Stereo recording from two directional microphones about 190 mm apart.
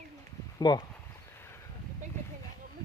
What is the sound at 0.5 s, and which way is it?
Speech, 20° left (ahead or behind).